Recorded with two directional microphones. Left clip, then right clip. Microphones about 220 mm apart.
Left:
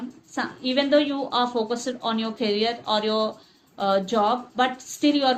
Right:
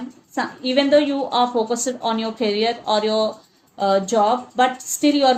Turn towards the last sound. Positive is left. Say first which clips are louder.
# right 5 dB
turn(degrees=-40)  # may be behind; listen again after turning